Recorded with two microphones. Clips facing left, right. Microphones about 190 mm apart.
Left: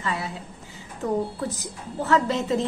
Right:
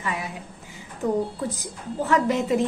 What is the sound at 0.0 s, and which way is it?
Speech, 15° right (ahead or behind).